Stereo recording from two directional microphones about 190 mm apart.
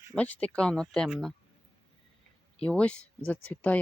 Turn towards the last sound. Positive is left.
turn(degrees=10)  # may be behind; listen again after turning